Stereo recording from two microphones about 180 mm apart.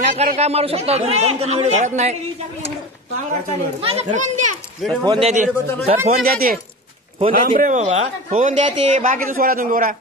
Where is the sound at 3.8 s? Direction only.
35° right (ahead or behind).